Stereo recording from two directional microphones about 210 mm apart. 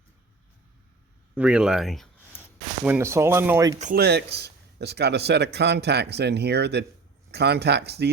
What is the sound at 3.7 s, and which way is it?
Speech, 35° right (ahead or behind).